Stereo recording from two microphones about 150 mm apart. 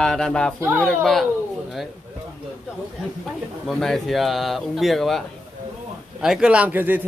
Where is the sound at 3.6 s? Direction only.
Centre (ahead or behind).